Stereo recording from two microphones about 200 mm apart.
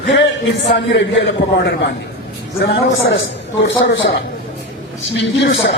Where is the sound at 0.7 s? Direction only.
65° left (ahead or behind).